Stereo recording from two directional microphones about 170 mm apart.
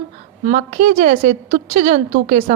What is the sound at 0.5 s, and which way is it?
A woman's voice, 45° right (ahead or behind).